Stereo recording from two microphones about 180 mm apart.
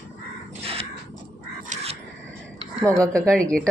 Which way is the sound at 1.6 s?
40° right (ahead or behind).